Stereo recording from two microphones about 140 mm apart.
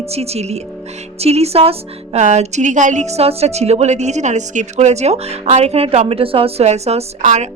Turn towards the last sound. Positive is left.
turn(degrees=-55)  # may be behind; listen again after turning